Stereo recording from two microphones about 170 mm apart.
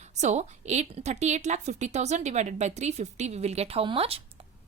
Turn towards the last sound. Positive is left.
turn(degrees=-35)  # may be behind; listen again after turning